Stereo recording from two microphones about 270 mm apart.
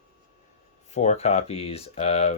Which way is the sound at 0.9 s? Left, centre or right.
Left.